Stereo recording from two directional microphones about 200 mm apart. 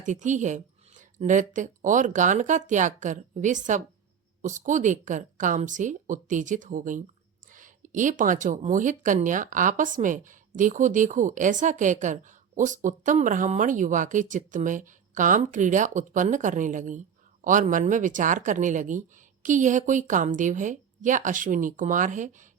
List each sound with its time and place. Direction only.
0.0 s speech: 40° right (ahead or behind)